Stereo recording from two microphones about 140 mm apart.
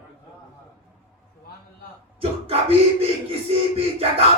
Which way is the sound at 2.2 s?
45° right (ahead or behind).